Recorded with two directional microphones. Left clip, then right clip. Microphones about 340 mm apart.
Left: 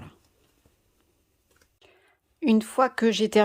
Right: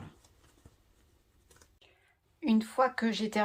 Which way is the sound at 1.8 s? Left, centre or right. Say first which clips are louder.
Left 5 dB; centre.